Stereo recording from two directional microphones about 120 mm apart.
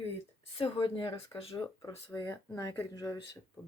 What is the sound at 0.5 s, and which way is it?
Speech, 45° left (ahead or behind).